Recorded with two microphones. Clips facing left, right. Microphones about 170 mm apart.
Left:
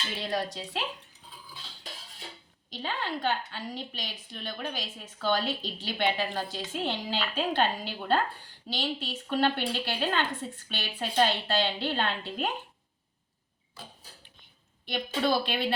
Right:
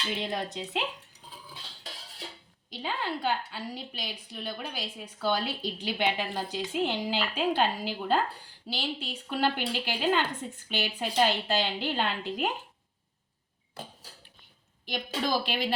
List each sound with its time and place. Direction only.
0.2 s speech: 20° right (ahead or behind)
2.8 s a woman's voice: 10° right (ahead or behind)
14.8 s a woman's voice: 10° right (ahead or behind)